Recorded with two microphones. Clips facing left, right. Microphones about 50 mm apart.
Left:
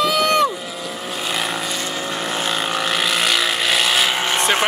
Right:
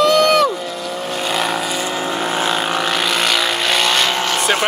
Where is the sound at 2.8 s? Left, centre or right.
Centre.